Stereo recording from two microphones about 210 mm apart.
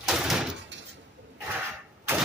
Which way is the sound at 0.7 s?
60° right (ahead or behind).